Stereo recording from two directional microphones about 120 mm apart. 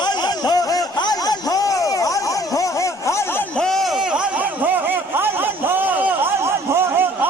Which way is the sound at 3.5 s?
5° left (ahead or behind).